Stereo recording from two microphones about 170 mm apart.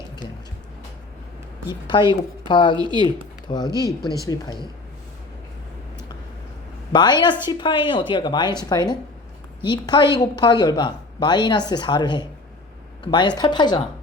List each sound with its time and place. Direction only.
1.6 s speech: 25° left (ahead or behind)
2.7 s speech: 25° right (ahead or behind)
3.5 s speech: 25° left (ahead or behind)
6.9 s speech: 25° left (ahead or behind)